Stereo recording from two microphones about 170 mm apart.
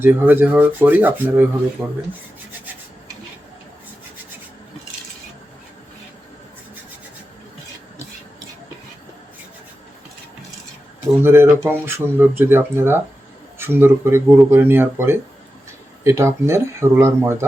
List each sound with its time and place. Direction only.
0.0 s speech: 10° right (ahead or behind)
11.2 s speech: 15° right (ahead or behind)